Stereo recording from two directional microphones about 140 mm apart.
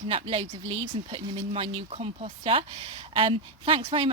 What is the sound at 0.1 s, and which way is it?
Speech, 40° right (ahead or behind).